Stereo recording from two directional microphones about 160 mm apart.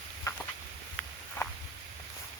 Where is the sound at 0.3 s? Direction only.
20° left (ahead or behind).